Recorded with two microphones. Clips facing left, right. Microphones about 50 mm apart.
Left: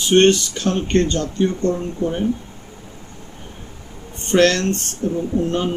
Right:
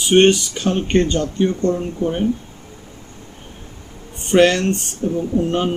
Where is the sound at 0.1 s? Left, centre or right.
Centre.